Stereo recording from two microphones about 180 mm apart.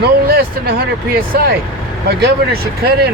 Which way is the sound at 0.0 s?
60° right (ahead or behind).